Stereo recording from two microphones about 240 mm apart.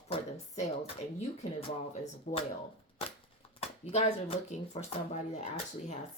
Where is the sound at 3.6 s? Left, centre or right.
Left.